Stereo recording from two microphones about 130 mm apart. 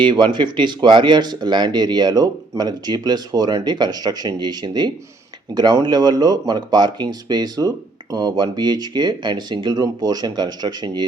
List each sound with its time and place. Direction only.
0.0 s speech: 35° right (ahead or behind)